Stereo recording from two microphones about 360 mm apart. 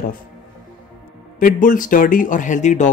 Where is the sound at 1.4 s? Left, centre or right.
Left.